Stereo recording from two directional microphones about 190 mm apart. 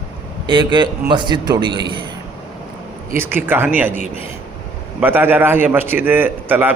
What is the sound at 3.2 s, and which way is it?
Speech, 10° right (ahead or behind).